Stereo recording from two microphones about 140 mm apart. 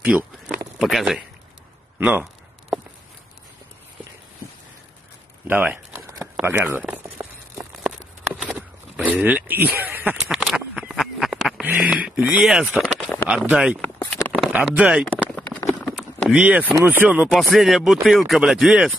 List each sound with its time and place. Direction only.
0.0 s speech: 10° right (ahead or behind)
2.0 s speech: 10° right (ahead or behind)
5.5 s speech: 15° right (ahead or behind)
6.8 s a sound: 10° right (ahead or behind)
10.1 s a sound: centre (ahead or behind)
11.6 s speech: 10° right (ahead or behind)
12.8 s a sound: 5° right (ahead or behind)
13.5 s speech: 5° right (ahead or behind)
15.0 s run: 10° left (ahead or behind)
15.9 s vehicle: centre (ahead or behind)
16.8 s speech: 10° right (ahead or behind)
17.4 s speech: centre (ahead or behind)